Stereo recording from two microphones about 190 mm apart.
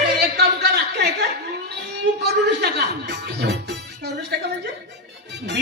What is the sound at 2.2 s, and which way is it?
Music, 60° right (ahead or behind).